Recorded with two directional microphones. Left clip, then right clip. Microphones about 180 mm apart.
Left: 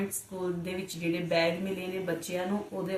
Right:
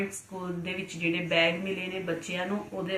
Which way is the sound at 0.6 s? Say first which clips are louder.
Right 3 dB; 20° left (ahead or behind).